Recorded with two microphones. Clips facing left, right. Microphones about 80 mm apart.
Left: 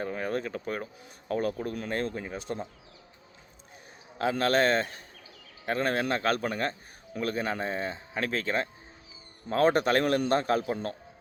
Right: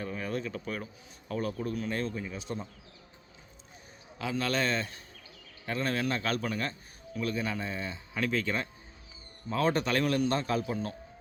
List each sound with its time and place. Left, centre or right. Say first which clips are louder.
0.0 s a sound: left 3 dB; left
1.3 s a man's voice: left 3 dB; left
4.2 s a man's voice: left 6 dB; left
9.5 s a man's voice: left 5 dB; left